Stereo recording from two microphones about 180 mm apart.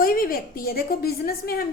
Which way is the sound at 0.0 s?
55° left (ahead or behind).